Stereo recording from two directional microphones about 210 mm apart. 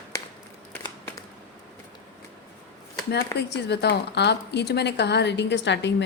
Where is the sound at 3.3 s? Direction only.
55° left (ahead or behind).